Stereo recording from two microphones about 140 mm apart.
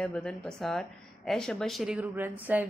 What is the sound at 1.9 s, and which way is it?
Speech, 15° right (ahead or behind).